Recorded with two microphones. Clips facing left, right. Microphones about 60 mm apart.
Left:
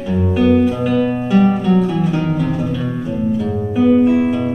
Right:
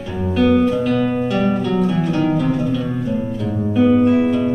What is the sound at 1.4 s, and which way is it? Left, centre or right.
Music, centre.